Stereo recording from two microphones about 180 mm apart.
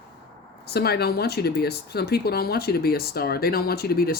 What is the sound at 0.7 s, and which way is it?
Speech, 65° left (ahead or behind).